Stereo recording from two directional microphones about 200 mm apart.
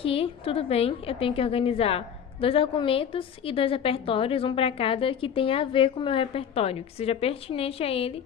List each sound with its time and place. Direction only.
0.0 s a woman's voice: 30° left (ahead or behind)